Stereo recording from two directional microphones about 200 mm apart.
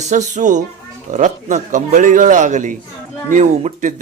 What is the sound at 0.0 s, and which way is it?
A man's voice, 35° right (ahead or behind).